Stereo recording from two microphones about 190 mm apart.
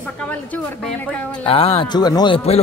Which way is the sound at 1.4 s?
30° left (ahead or behind).